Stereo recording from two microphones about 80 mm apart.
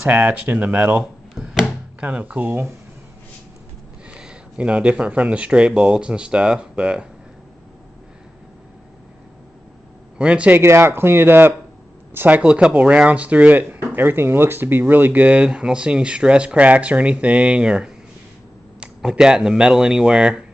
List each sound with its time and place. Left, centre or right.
0.0 s speech: centre
4.2 s speech: centre
10.1 s a man's voice: centre
10.6 s speech: right; by 17.9 s centre
18.9 s speech: centre